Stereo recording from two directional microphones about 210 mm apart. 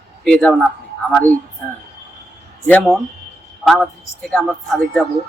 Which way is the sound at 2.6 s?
5° left (ahead or behind).